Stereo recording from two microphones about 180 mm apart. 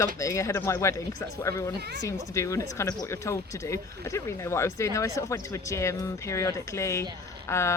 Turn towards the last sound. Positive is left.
turn(degrees=15)  # may be behind; listen again after turning